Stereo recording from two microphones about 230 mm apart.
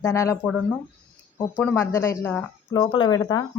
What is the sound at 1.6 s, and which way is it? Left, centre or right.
Speech, centre.